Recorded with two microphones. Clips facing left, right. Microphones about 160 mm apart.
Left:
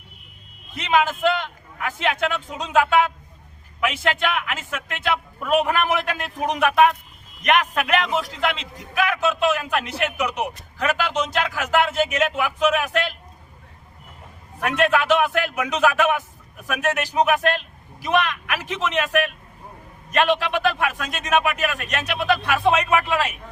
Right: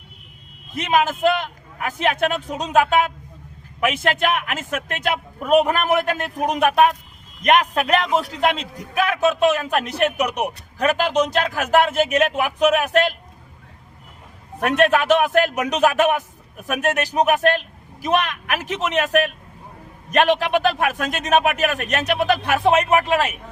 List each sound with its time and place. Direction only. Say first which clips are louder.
0.8 s a man's voice: right 1 dB; 45° right (ahead or behind)
14.6 s a man's voice: right 3 dB; 45° right (ahead or behind)